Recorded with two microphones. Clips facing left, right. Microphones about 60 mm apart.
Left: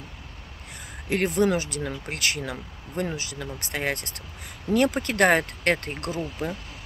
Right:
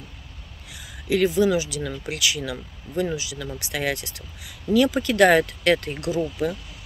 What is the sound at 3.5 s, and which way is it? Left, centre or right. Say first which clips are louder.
Speech: right 2 dB; left.